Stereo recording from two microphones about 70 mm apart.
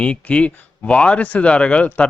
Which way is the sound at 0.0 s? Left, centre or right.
Centre.